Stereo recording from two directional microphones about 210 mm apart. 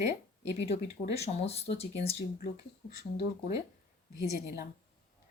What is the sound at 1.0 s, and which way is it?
Speech, 30° left (ahead or behind).